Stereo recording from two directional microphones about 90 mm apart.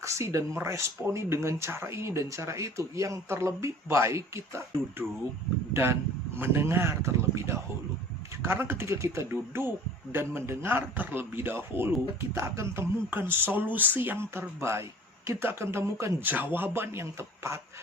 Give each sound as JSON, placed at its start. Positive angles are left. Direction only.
{"t": 0.0, "sound": "speech", "side_deg": -35}